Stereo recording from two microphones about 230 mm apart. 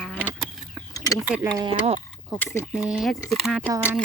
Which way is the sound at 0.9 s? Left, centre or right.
Centre.